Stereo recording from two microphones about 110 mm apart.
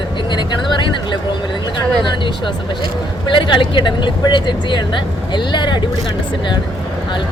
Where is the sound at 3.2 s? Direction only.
50° left (ahead or behind).